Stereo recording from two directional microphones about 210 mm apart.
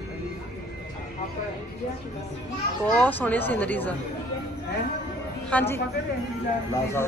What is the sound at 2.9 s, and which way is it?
A woman's voice, 5° left (ahead or behind).